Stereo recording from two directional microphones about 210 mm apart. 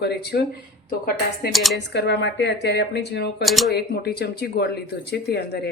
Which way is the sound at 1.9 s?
55° left (ahead or behind).